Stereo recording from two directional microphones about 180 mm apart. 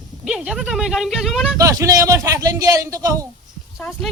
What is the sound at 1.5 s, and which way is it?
Speech, 20° right (ahead or behind).